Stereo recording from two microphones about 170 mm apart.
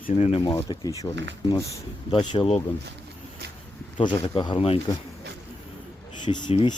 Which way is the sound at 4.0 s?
30° left (ahead or behind).